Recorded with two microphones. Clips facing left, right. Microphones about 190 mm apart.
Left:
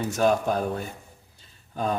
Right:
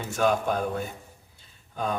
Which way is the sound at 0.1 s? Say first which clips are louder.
Left 1 dB; 40° left (ahead or behind).